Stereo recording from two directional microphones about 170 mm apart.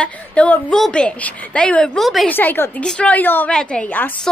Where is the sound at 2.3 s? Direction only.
10° left (ahead or behind).